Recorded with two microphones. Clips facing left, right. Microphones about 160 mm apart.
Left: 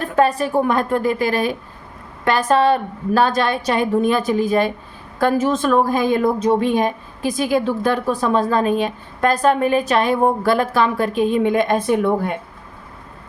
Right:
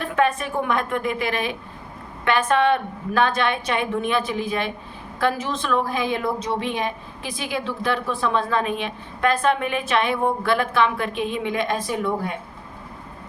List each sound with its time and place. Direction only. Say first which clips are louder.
0.0 s a woman's voice: left 5 dB; 35° left (ahead or behind); by 12.4 s 55° left (ahead or behind)